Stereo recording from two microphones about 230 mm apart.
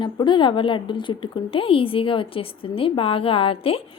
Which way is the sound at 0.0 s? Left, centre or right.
Centre.